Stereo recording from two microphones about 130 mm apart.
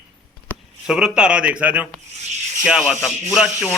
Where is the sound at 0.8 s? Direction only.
5° right (ahead or behind).